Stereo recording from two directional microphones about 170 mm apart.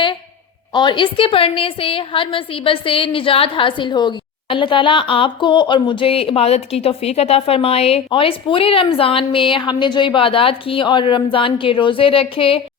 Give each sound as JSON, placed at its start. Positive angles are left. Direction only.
{"t": 0.7, "sound": "a woman's voice", "side_deg": 25}